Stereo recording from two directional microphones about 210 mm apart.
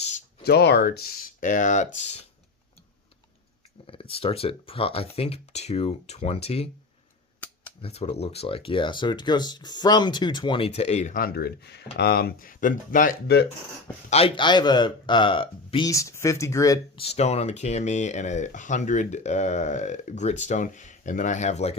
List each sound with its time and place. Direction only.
0.4 s a man's voice: 50° left (ahead or behind); by 2.2 s 30° left (ahead or behind)
3.8 s speech: 25° left (ahead or behind)
7.8 s speech: 30° left (ahead or behind); by 13.5 s 50° left (ahead or behind)
14.1 s a man's voice: 25° left (ahead or behind)